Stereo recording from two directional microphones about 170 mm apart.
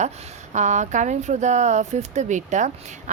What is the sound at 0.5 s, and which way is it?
A woman's voice, 45° right (ahead or behind).